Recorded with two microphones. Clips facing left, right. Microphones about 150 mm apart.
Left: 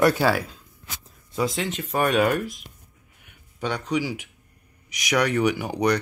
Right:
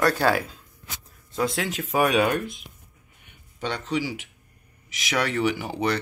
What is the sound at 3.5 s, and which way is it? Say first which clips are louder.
Speech: left 2 dB; 10° left (ahead or behind).